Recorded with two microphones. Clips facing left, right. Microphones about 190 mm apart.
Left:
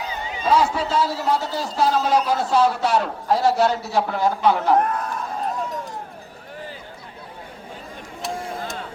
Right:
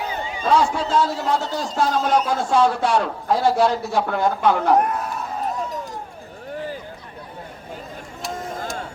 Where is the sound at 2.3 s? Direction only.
50° right (ahead or behind).